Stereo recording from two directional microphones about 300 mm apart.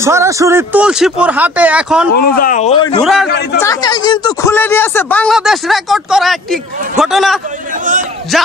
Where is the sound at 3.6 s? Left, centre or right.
Centre.